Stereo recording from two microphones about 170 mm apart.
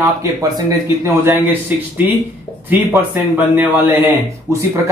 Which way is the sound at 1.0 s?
15° right (ahead or behind).